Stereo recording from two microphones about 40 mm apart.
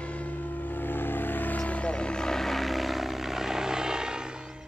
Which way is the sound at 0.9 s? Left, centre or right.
Left.